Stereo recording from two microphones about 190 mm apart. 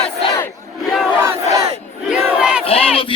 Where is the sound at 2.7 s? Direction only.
30° left (ahead or behind).